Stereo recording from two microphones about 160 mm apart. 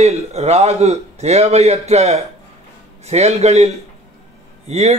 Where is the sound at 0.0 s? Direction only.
40° right (ahead or behind).